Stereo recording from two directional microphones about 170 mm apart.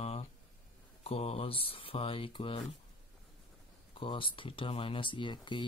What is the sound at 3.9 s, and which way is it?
Speech, 30° left (ahead or behind).